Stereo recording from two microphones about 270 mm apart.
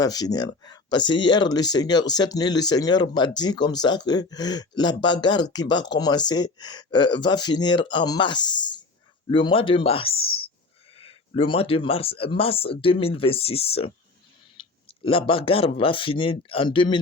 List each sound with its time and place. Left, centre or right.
0.0 s speech: centre